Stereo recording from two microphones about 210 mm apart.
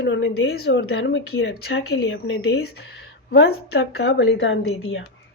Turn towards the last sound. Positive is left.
turn(degrees=70)  # may be behind; listen again after turning